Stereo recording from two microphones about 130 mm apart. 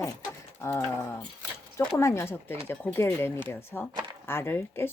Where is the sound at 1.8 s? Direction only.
20° left (ahead or behind).